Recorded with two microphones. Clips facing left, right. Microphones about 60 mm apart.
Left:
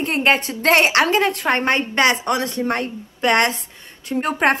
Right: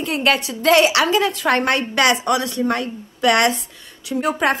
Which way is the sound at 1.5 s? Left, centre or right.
Left.